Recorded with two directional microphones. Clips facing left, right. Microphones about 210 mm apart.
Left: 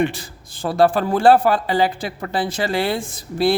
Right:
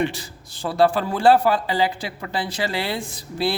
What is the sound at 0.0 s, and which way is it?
A man's voice, 50° left (ahead or behind).